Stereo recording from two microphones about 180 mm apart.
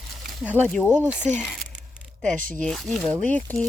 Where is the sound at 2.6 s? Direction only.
Centre (ahead or behind).